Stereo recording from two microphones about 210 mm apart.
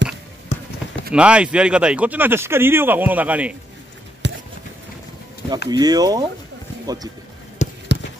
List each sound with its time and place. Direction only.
0.5 s basketball bounce: 35° left (ahead or behind)
1.1 s speech: 5° right (ahead or behind)
4.2 s a sound: 55° right (ahead or behind)
5.7 s speech: 20° right (ahead or behind)
7.6 s basketball bounce: 35° left (ahead or behind)